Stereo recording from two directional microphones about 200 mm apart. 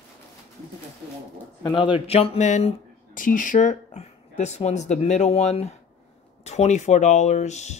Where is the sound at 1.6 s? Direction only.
25° left (ahead or behind).